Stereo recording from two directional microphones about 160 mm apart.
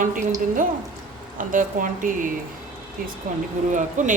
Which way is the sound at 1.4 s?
55° right (ahead or behind).